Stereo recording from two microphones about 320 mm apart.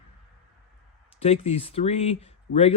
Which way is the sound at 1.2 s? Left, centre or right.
Centre.